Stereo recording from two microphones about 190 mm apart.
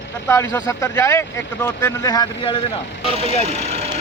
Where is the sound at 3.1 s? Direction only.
30° right (ahead or behind).